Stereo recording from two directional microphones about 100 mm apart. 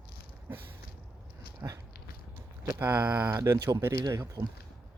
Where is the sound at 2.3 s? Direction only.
20° right (ahead or behind).